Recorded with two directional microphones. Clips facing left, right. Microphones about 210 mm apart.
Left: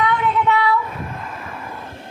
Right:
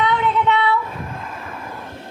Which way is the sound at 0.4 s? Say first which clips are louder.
Even; 25° right (ahead or behind).